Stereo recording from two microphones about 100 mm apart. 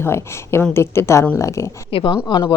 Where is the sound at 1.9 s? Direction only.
55° left (ahead or behind).